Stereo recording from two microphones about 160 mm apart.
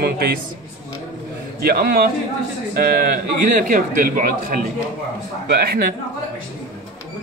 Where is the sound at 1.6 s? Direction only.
70° right (ahead or behind).